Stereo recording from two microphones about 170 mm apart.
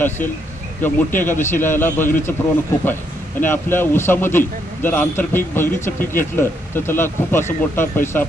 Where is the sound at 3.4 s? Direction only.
10° left (ahead or behind).